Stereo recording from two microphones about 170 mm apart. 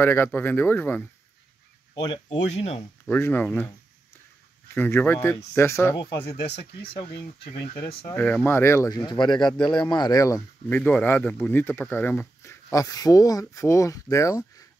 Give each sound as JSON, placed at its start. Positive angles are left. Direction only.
{"t": 0.0, "sound": "speech", "side_deg": 15}
{"t": 2.0, "sound": "speech", "side_deg": 30}
{"t": 3.1, "sound": "speech", "side_deg": 10}
{"t": 4.7, "sound": "speech", "side_deg": 10}
{"t": 8.1, "sound": "speech", "side_deg": 10}
{"t": 9.4, "sound": "speech", "side_deg": 5}
{"t": 9.8, "sound": "speech", "side_deg": 25}
{"t": 10.8, "sound": "speech", "side_deg": 5}